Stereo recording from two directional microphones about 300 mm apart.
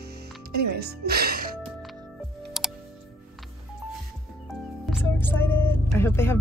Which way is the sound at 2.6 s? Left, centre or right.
Centre.